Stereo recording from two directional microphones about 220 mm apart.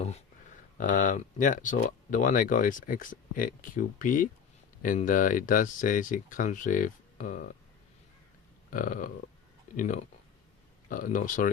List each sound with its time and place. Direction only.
0.8 s speech: 35° left (ahead or behind)
8.7 s speech: 35° left (ahead or behind)